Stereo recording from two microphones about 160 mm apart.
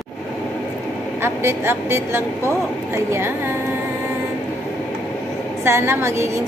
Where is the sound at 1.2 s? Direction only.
15° right (ahead or behind).